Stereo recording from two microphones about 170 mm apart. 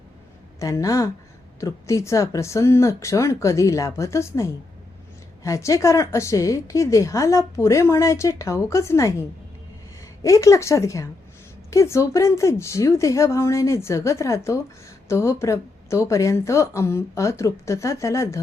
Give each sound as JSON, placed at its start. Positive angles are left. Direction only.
{"t": 0.6, "sound": "a woman's voice", "side_deg": 20}
{"t": 10.2, "sound": "a woman's voice", "side_deg": 20}